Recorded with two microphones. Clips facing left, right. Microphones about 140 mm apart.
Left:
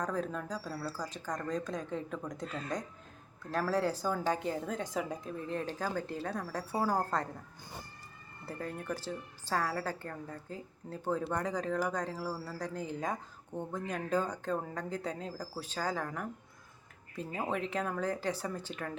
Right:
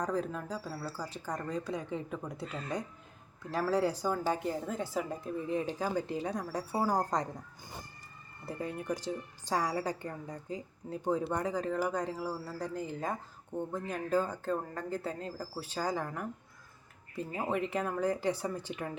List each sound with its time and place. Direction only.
0.0 s a woman's voice: 10° right (ahead or behind)
8.4 s a woman's voice: 10° right (ahead or behind)